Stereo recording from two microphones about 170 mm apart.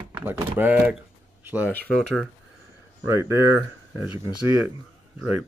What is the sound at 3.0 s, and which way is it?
Speech, 15° right (ahead or behind).